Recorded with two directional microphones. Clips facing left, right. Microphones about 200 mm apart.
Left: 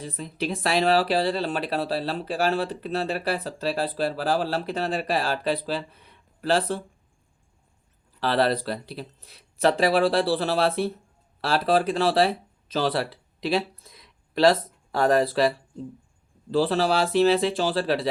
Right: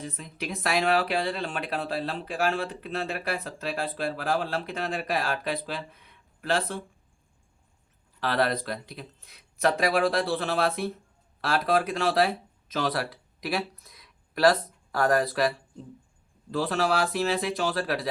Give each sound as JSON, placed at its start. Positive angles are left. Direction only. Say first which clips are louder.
{"t": 0.0, "sound": "speech", "louder": "left 5 dB", "side_deg": 35}
{"t": 8.2, "sound": "speech", "louder": "left 4 dB", "side_deg": 30}